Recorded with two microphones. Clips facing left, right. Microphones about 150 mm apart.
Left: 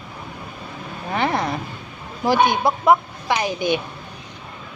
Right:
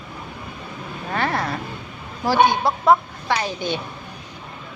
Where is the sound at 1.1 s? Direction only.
15° left (ahead or behind).